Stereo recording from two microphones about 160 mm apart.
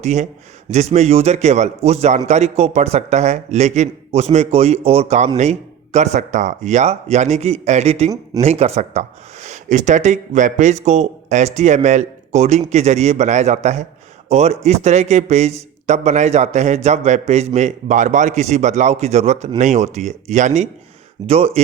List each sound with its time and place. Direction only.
0.0 s speech: 45° right (ahead or behind)